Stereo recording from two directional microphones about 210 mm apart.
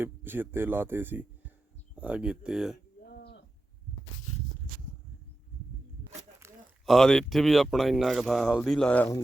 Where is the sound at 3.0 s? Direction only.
50° left (ahead or behind).